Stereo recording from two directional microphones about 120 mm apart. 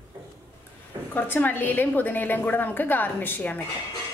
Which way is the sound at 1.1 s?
15° left (ahead or behind).